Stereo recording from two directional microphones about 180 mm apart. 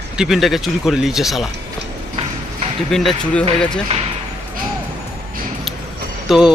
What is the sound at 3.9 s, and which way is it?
Basketball bounce, 35° right (ahead or behind).